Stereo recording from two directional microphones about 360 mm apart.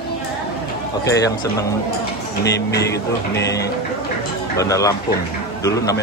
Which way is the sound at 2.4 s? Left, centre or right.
Left.